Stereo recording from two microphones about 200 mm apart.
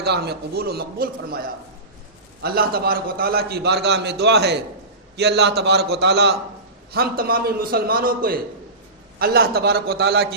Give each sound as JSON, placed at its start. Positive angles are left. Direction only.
{"t": 0.0, "sound": "a man's voice", "side_deg": -55}
{"t": 2.4, "sound": "a man's voice", "side_deg": -50}